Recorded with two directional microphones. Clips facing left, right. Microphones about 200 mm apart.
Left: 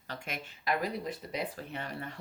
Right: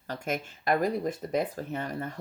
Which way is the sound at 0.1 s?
45° right (ahead or behind).